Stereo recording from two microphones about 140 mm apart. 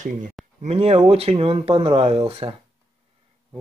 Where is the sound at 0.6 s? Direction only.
50° right (ahead or behind).